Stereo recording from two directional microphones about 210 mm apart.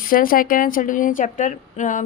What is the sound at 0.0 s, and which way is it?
A woman's voice, 40° left (ahead or behind).